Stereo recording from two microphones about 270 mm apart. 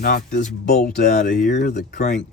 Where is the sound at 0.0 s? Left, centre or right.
Left.